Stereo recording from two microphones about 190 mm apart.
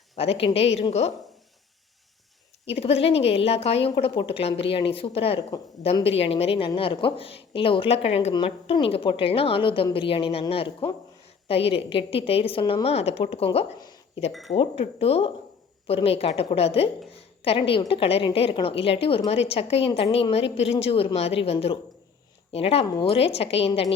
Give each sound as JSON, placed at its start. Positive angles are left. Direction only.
{"t": 0.2, "sound": "a woman's voice", "side_deg": 30}
{"t": 2.6, "sound": "a woman's voice", "side_deg": 30}